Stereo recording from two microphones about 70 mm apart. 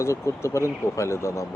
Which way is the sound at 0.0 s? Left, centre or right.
Left.